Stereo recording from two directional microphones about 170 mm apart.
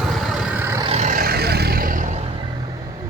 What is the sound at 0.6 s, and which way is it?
Vehicle, 15° right (ahead or behind).